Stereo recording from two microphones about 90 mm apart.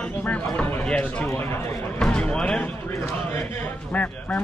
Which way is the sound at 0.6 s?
20° left (ahead or behind).